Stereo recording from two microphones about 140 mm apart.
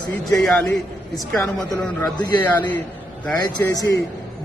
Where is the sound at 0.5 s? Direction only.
10° left (ahead or behind).